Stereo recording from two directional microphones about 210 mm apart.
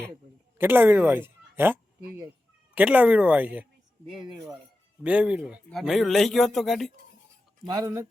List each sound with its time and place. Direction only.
0.6 s speech: 10° right (ahead or behind)
7.7 s speech: 15° right (ahead or behind)